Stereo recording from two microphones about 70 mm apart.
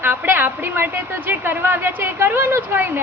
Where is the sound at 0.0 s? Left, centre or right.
Right.